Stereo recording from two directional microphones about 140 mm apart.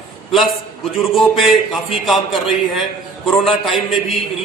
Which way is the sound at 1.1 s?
Centre (ahead or behind).